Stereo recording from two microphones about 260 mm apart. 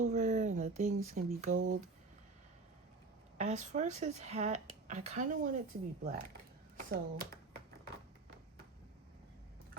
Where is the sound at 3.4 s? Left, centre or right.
Right.